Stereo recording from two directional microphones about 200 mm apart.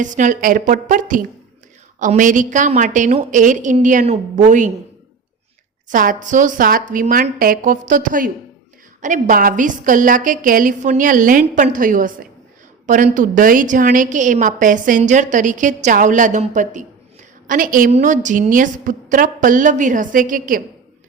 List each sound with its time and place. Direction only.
0.0 s a woman's voice: 40° right (ahead or behind)
5.9 s a woman's voice: 40° right (ahead or behind)